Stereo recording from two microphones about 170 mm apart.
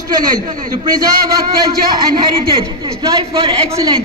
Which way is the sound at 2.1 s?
25° right (ahead or behind).